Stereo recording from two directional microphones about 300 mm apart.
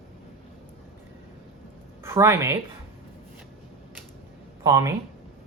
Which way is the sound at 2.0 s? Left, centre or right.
Centre.